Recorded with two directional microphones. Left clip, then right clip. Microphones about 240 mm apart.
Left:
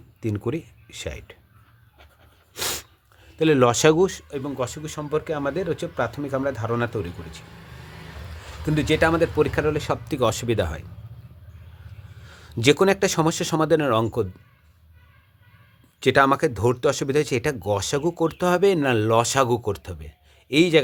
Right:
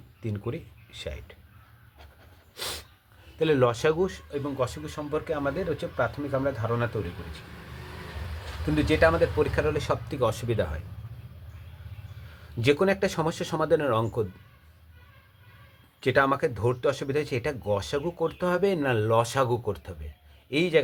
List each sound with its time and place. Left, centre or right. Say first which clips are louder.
0.2 s speech: left 8 dB; left
2.6 s a sound: left 6 dB; left
3.3 s speech: left 5 dB; left
8.7 s speech: left 2 dB; left
12.5 s speech: left 5 dB; left
16.0 s speech: left 5 dB; left